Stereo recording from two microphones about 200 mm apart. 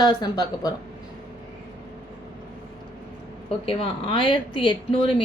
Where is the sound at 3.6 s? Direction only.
25° left (ahead or behind).